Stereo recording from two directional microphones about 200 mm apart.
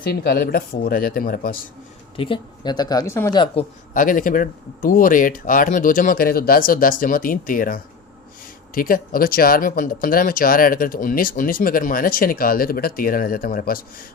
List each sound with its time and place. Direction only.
0.1 s speech: 50° left (ahead or behind)
2.1 s speech: 25° left (ahead or behind)
3.3 s speech: 25° left (ahead or behind)
3.9 s speech: 40° left (ahead or behind)